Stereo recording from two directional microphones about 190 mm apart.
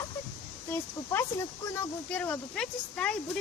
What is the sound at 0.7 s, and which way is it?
Speech, 10° left (ahead or behind).